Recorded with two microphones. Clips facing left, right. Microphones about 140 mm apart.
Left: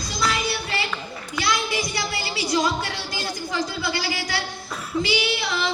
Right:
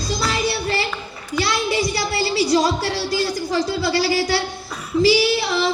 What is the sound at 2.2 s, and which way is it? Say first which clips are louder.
Music: right 7 dB; 30° right (ahead or behind).